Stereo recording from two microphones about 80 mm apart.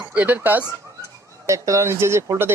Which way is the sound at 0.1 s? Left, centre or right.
Centre.